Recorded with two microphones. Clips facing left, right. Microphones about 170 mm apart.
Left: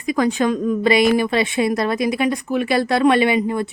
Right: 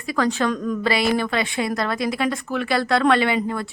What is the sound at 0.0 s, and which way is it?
A woman's voice, 15° left (ahead or behind).